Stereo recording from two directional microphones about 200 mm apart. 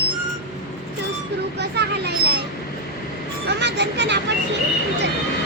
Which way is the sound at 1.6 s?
55° right (ahead or behind).